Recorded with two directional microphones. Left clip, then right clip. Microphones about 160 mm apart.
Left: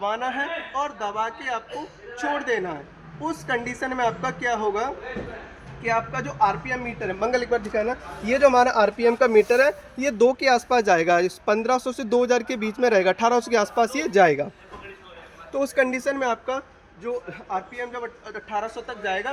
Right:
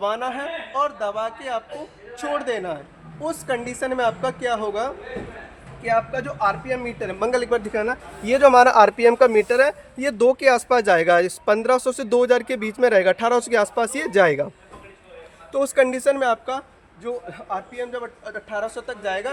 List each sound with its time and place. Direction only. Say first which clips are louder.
0.0 s a man's voice: right 1 dB; 30° right (ahead or behind)
7.3 s a man's voice: right 2 dB; 15° right (ahead or behind)
15.5 s a man's voice: right 4 dB; 20° right (ahead or behind)